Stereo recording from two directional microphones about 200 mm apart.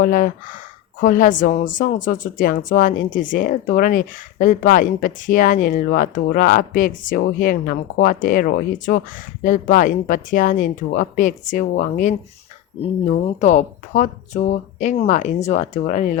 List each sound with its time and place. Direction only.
0.0 s a woman's voice: 40° left (ahead or behind)